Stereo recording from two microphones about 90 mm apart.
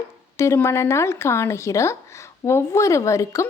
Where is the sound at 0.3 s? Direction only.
30° left (ahead or behind).